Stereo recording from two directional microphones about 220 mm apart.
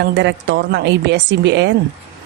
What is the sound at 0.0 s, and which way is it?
A woman's voice, 50° right (ahead or behind).